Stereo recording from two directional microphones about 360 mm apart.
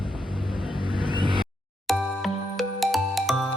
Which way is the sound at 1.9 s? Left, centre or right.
Centre.